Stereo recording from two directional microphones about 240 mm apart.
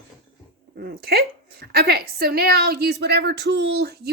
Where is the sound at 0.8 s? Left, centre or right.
Right.